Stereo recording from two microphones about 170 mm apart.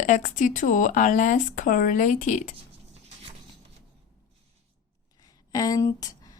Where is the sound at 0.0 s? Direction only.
45° left (ahead or behind).